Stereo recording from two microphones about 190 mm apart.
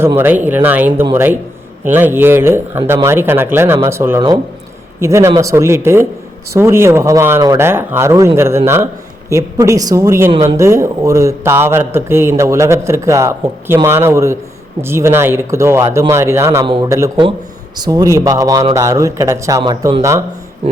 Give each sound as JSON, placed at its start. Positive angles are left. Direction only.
{"t": 0.0, "sound": "speech", "side_deg": -10}
{"t": 16.6, "sound": "a man's voice", "side_deg": -25}
{"t": 16.9, "sound": "a man's voice", "side_deg": -15}